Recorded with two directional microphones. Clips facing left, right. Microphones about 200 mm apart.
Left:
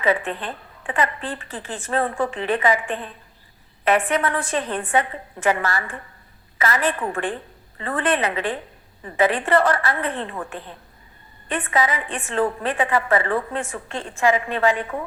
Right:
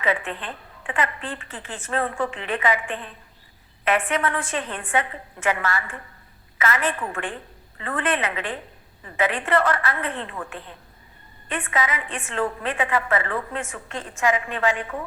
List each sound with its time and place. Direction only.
0.0 s a woman's voice: 40° left (ahead or behind)